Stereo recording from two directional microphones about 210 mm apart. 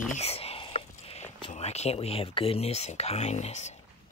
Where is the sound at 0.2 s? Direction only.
30° left (ahead or behind).